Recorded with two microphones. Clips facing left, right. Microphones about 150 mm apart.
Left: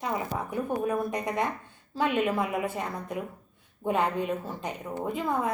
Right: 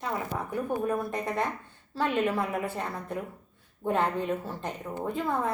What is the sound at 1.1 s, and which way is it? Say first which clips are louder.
A woman's voice: left 1 dB; 15° left (ahead or behind).